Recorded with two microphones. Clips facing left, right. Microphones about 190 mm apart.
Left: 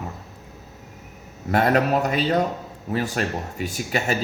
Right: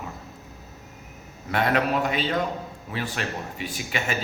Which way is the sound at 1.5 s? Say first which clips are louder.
Left 4 dB; 40° left (ahead or behind).